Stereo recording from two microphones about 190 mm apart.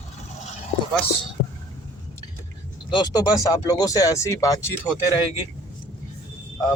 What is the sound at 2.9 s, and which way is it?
Speech, 20° left (ahead or behind).